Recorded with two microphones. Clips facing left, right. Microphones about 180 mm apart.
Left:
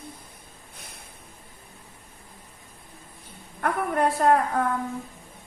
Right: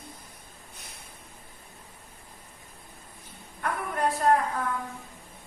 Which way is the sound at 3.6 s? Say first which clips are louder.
Left 5 dB; 55° left (ahead or behind).